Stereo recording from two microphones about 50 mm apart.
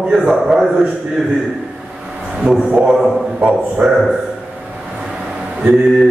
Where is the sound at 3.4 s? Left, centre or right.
Centre.